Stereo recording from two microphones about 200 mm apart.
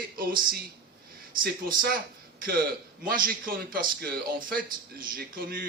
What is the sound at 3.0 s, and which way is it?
Speech, 45° right (ahead or behind).